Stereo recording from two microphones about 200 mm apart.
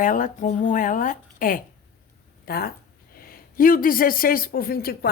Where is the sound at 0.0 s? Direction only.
40° left (ahead or behind).